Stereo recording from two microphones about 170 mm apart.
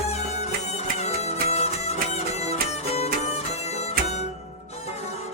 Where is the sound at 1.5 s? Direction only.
40° left (ahead or behind).